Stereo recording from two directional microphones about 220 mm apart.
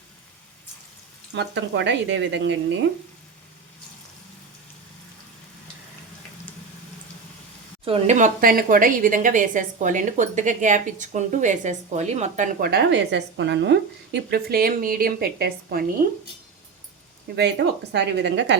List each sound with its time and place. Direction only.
1.4 s speech: 55° right (ahead or behind)
7.9 s a woman's voice: 30° right (ahead or behind)
17.9 s speech: 50° right (ahead or behind)